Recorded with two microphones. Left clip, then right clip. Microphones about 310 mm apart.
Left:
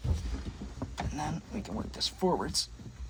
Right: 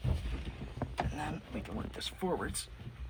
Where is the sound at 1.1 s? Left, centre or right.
Left.